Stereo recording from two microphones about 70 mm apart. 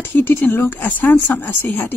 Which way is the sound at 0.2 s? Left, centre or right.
Left.